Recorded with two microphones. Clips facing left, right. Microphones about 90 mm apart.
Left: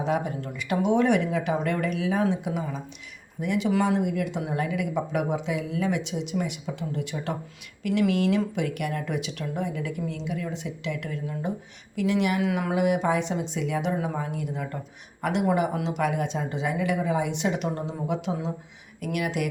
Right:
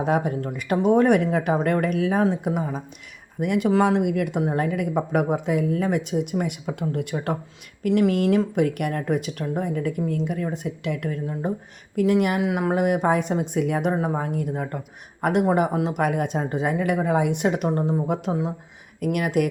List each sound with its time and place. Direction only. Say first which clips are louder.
0.0 s speech: right 4 dB; 50° right (ahead or behind)
3.4 s speech: right 4 dB; 55° right (ahead or behind)
4.4 s speech: right 4 dB; 45° right (ahead or behind)
12.4 s speech: right 3 dB; 25° right (ahead or behind)
12.7 s speech: right 3 dB; 45° right (ahead or behind)
13.9 s speech: right 4 dB; 35° right (ahead or behind)